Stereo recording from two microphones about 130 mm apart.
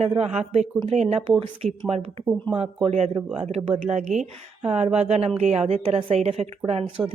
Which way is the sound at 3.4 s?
55° right (ahead or behind).